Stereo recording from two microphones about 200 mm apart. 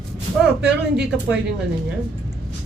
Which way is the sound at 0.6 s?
5° right (ahead or behind).